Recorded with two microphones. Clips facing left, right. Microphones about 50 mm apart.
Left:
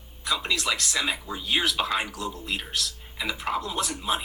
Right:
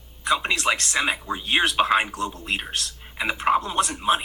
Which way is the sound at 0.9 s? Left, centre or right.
Right.